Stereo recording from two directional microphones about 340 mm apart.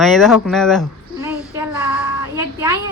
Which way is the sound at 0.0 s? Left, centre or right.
Centre.